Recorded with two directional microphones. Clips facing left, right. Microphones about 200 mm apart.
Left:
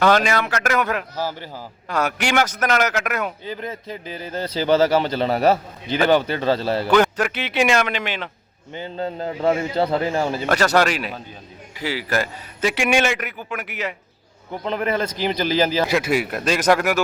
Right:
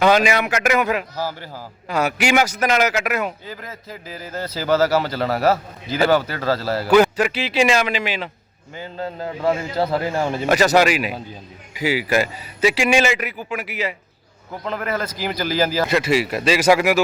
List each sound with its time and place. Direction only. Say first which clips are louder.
0.0 s a man's voice: right 1 dB; 10° right (ahead or behind)
1.1 s a man's voice: even; 15° left (ahead or behind)
1.9 s a man's voice: right 3 dB; 10° right (ahead or behind)
3.4 s a man's voice: left 5 dB; 25° left (ahead or behind)
6.8 s a man's voice: right 4 dB; centre (ahead or behind)
8.7 s a man's voice: left 2 dB; 25° left (ahead or behind)
10.3 s a man's voice: right 4 dB; 5° right (ahead or behind)
14.5 s a man's voice: left 2 dB; 25° left (ahead or behind)
15.9 s a man's voice: right 2 dB; centre (ahead or behind)